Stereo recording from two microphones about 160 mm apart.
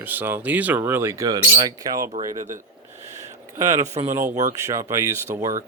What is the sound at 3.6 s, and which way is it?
Speech, 20° right (ahead or behind).